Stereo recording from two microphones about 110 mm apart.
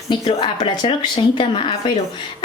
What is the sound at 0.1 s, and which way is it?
A woman's voice, 45° left (ahead or behind).